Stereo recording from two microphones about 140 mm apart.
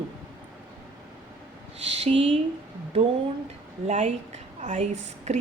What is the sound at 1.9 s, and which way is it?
Speech, 45° right (ahead or behind).